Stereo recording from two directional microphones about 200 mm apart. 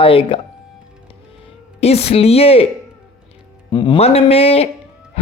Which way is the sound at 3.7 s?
25° left (ahead or behind).